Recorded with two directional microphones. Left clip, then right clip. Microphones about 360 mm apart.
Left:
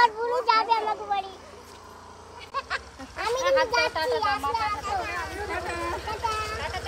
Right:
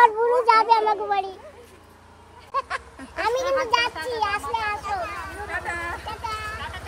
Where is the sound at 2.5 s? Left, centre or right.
Right.